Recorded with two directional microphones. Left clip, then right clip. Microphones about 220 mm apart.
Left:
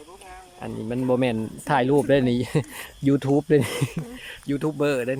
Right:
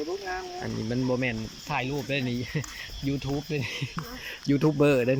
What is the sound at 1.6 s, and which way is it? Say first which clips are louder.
Speech: left 11 dB; 30° left (ahead or behind).